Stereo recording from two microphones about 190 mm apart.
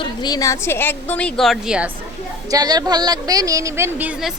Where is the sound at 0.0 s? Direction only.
20° left (ahead or behind); by 1.9 s 5° right (ahead or behind).